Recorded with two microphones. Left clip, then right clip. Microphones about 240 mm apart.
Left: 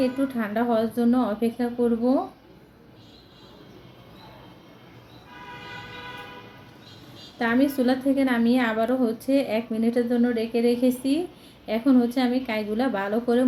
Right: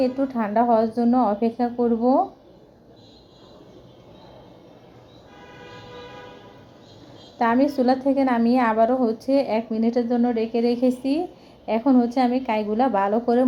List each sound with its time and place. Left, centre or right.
0.0 s a woman's voice: centre
7.3 s a woman's voice: centre